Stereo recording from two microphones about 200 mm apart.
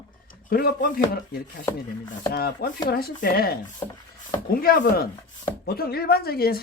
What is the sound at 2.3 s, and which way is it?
A woman's voice, 50° left (ahead or behind).